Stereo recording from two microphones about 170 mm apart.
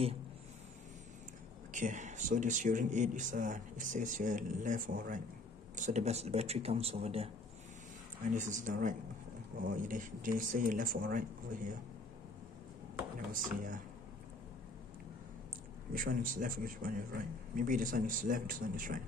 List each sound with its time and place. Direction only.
1.7 s a man's voice: 50° right (ahead or behind)
8.3 s a man's voice: 50° right (ahead or behind)
15.9 s a man's voice: 55° right (ahead or behind)